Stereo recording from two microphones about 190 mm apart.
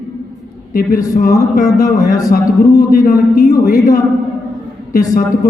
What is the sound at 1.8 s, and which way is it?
A man's voice, 50° left (ahead or behind).